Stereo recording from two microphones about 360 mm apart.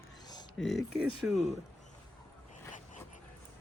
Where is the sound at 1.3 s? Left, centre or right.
Centre.